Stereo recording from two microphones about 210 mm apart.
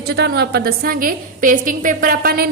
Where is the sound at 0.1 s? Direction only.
50° right (ahead or behind).